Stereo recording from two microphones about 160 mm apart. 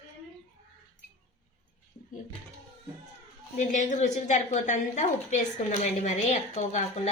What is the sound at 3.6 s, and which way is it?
A woman's voice, 50° left (ahead or behind).